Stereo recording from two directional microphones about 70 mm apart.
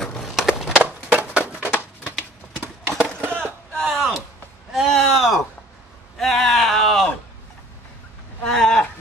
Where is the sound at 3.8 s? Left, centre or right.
Centre.